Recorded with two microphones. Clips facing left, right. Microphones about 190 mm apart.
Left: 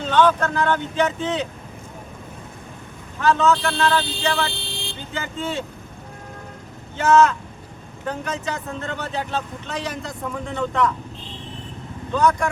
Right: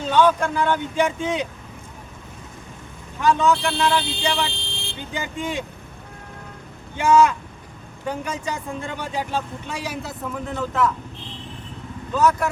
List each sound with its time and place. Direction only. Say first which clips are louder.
0.0 s a man's voice: even; 10° right (ahead or behind)
3.2 s a man's voice: even; 15° right (ahead or behind)
4.6 s vehicle: left 2 dB; 35° left (ahead or behind)
5.1 s a man's voice: even; 15° right (ahead or behind)
6.9 s a man's voice: even; 10° right (ahead or behind)
12.1 s speech: even; 5° right (ahead or behind)